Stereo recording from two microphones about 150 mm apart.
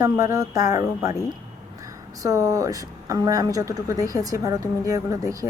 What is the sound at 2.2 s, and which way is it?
Speech, 20° right (ahead or behind).